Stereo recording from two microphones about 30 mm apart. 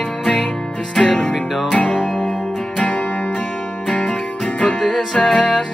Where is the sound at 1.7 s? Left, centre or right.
Left.